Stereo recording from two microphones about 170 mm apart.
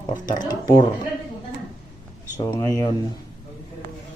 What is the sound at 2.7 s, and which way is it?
Speech, 20° left (ahead or behind).